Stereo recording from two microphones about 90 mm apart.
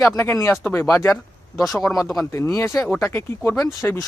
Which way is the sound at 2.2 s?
30° left (ahead or behind).